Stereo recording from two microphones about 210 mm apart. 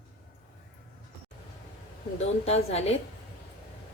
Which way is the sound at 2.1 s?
30° left (ahead or behind).